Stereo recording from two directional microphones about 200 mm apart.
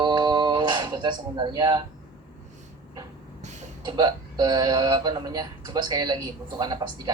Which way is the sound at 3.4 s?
35° right (ahead or behind).